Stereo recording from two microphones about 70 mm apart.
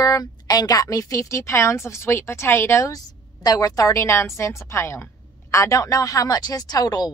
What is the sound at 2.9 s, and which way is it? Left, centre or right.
A woman's voice, left.